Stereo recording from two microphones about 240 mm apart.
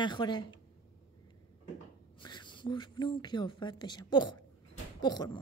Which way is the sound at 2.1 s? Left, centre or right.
Centre.